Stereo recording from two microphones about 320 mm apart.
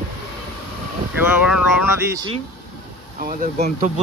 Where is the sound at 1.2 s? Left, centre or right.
Centre.